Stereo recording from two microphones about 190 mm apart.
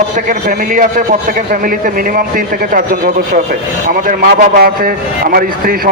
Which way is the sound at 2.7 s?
50° right (ahead or behind).